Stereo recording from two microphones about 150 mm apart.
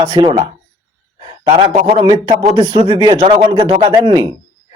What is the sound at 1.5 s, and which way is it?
A man's voice, 40° right (ahead or behind).